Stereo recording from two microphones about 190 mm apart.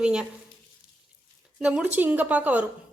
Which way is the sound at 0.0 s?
5° right (ahead or behind).